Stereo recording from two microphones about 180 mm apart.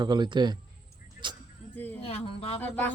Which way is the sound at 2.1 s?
35° left (ahead or behind).